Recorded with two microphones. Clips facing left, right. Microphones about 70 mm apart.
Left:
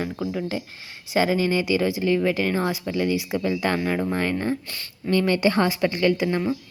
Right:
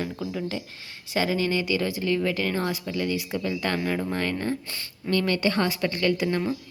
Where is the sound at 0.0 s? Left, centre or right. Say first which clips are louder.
Left 3 dB; centre.